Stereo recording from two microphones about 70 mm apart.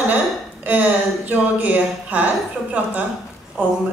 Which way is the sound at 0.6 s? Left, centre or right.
Right.